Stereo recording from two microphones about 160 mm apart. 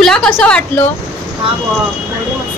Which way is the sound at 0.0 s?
5° left (ahead or behind).